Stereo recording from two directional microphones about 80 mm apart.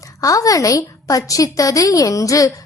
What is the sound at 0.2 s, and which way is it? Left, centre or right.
A woman's voice, left.